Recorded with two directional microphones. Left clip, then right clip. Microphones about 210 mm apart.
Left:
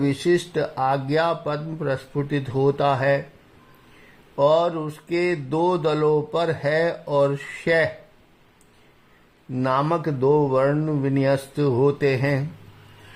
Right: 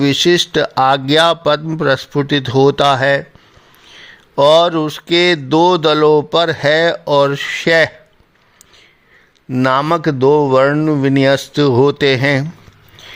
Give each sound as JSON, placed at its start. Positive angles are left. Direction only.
{"t": 0.3, "sound": "speech", "side_deg": -50}
{"t": 4.4, "sound": "speech", "side_deg": -45}
{"t": 9.6, "sound": "speech", "side_deg": -45}